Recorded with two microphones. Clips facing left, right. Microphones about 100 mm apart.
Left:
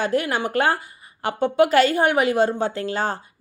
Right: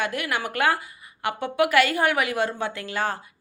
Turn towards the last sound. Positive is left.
turn(degrees=30)  # may be behind; listen again after turning